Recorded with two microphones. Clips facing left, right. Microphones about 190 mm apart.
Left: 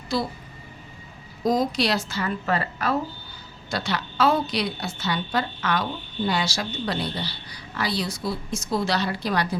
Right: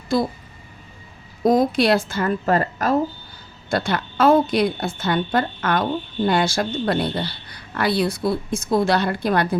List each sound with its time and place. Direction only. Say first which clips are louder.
0.1 s a woman's voice: right 6 dB; 50° right (ahead or behind)
1.5 s a woman's voice: right 6 dB; 55° right (ahead or behind)